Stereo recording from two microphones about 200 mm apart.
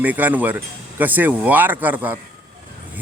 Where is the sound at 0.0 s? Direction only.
10° right (ahead or behind).